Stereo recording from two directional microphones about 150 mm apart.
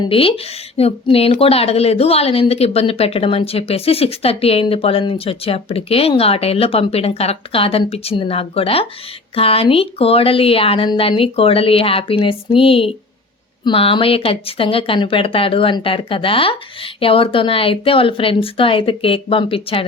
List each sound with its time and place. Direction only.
0.0 s speech: 40° left (ahead or behind)